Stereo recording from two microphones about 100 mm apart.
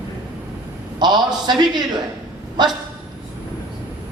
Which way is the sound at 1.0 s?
45° right (ahead or behind).